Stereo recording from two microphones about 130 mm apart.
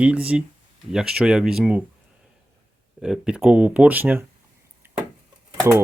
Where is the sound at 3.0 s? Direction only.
5° right (ahead or behind).